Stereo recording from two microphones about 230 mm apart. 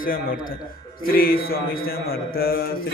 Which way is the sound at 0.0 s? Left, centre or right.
Left.